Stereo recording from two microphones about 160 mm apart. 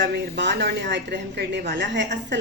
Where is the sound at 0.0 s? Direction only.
90° right.